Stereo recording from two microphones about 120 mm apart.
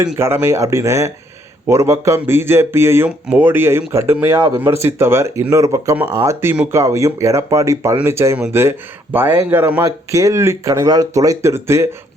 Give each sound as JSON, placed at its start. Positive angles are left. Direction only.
{"t": 0.2, "sound": "a man's voice", "side_deg": -20}